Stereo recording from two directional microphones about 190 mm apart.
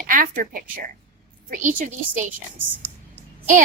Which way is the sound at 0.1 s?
45° right (ahead or behind).